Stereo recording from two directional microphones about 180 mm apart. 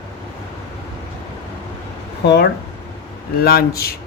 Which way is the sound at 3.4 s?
60° left (ahead or behind).